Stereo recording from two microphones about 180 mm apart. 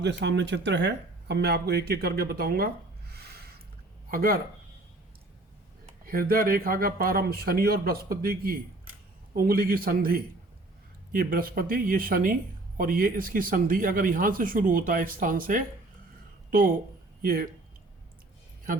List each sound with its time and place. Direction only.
0.0 s speech: 75° right (ahead or behind); by 2.6 s 60° right (ahead or behind)
3.1 s a sound: 60° right (ahead or behind)
4.1 s speech: 55° right (ahead or behind)
6.1 s speech: 55° right (ahead or behind)